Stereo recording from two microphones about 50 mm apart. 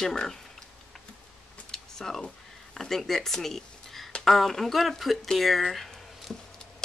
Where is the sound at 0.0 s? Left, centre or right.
Centre.